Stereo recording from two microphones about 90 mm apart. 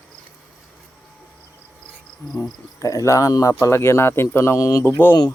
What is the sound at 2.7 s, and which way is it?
Speech, 35° left (ahead or behind).